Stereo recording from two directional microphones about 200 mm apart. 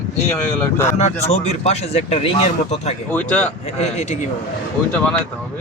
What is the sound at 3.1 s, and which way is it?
Speech, 5° left (ahead or behind).